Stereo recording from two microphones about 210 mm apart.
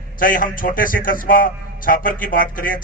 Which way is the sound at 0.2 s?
40° left (ahead or behind).